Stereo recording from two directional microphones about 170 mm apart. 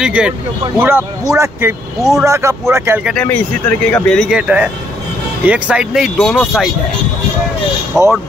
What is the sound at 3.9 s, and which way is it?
Speech, 5° left (ahead or behind).